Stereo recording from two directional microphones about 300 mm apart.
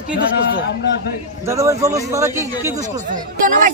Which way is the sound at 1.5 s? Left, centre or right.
Centre.